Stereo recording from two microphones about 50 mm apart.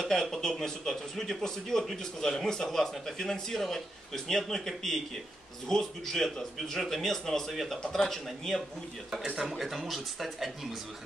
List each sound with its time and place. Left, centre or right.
0.0 s a man's voice: centre
9.4 s a man's voice: centre